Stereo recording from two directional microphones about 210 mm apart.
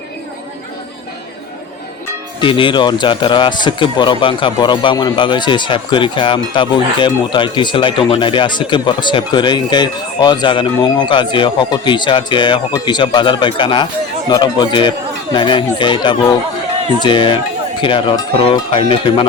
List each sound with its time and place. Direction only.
2.4 s a man's voice: 25° left (ahead or behind)